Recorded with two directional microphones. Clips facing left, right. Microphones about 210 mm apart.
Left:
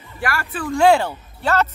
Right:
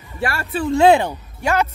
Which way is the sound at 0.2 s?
25° right (ahead or behind).